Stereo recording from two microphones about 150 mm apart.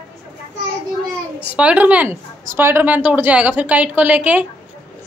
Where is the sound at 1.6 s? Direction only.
10° right (ahead or behind).